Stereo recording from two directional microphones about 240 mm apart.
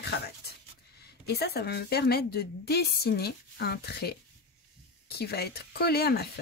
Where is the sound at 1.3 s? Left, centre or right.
Left.